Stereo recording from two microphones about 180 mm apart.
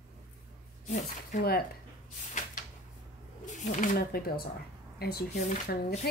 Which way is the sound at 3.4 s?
45° left (ahead or behind).